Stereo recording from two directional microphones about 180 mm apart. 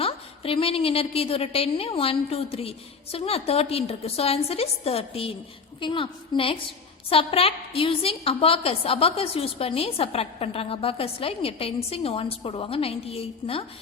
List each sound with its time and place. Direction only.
0.0 s a woman's voice: 30° left (ahead or behind)